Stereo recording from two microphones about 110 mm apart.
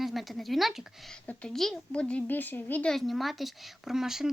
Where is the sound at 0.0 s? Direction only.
Centre (ahead or behind).